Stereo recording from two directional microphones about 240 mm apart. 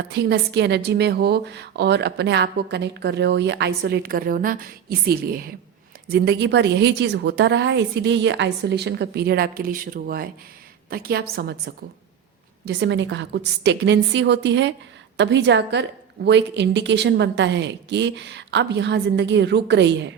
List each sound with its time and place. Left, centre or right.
0.1 s a woman's voice: right